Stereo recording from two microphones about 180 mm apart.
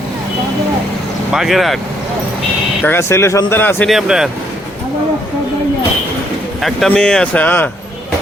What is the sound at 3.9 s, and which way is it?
Speech, 5° right (ahead or behind).